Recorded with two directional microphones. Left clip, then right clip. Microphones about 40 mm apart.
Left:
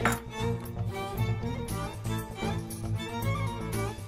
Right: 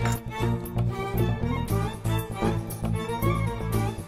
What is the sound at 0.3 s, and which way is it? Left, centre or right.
Music, left.